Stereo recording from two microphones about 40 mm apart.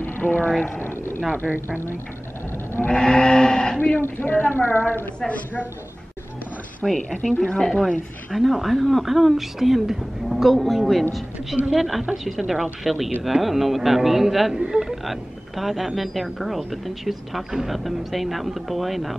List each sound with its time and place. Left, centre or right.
0.0 s a sound: left
0.7 s a sound: left
1.3 s speech: right
2.9 s speech: left
4.2 s a woman's voice: left
6.8 s speech: centre
7.3 s speech: left
8.3 s speech: centre